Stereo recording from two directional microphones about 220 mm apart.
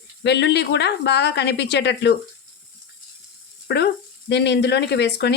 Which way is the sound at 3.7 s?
50° left (ahead or behind).